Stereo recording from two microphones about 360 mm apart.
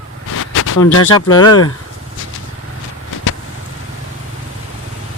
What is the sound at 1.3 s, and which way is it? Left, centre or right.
Speech, centre.